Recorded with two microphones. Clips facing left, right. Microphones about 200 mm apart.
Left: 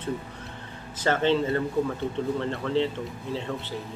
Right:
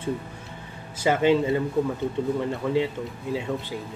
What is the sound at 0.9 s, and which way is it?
Speech, 10° right (ahead or behind).